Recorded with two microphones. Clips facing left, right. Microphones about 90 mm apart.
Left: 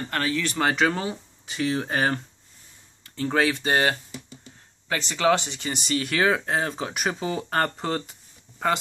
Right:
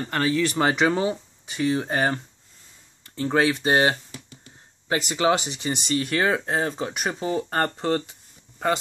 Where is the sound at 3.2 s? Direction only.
10° right (ahead or behind).